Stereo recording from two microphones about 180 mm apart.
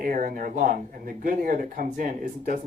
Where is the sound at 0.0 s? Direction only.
50° right (ahead or behind).